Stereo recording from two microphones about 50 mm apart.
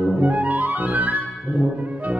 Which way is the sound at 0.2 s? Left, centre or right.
Right.